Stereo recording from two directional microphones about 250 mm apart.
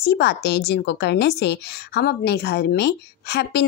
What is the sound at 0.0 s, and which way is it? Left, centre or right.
A woman's voice, left.